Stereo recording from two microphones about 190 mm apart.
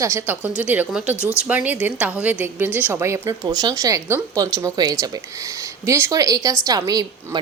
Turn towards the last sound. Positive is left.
turn(degrees=-20)  # may be behind; listen again after turning